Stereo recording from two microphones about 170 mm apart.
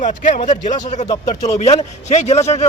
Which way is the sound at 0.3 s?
35° left (ahead or behind).